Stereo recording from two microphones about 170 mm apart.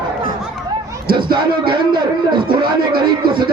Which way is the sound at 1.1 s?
25° right (ahead or behind).